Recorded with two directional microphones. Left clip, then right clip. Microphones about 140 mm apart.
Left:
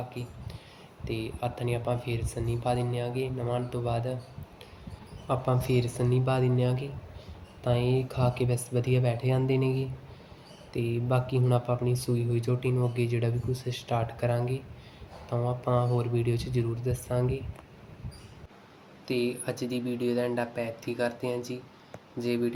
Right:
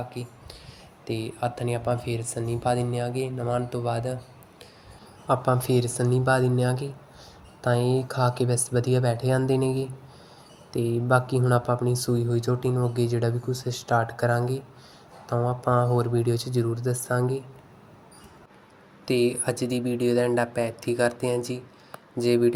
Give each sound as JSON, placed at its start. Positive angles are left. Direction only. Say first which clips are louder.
{"t": 0.1, "sound": "speech", "louder": "right 3 dB", "side_deg": -40}
{"t": 5.3, "sound": "speech", "louder": "right 5 dB", "side_deg": -40}
{"t": 19.0, "sound": "speech", "louder": "right 6 dB", "side_deg": -55}